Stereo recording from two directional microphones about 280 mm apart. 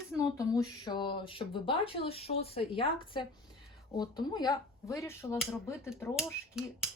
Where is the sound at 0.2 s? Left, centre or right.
Centre.